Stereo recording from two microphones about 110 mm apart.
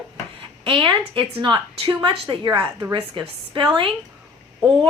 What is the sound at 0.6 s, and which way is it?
Speech, 50° right (ahead or behind).